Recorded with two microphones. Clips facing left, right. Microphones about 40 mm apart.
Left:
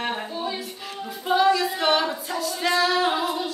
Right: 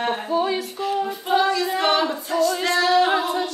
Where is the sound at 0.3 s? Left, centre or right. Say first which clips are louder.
Right 8 dB; right.